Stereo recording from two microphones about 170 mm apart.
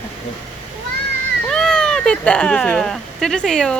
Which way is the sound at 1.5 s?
5° left (ahead or behind).